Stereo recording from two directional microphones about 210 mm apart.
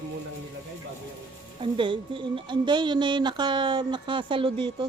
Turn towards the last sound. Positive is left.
turn(degrees=-25)  # may be behind; listen again after turning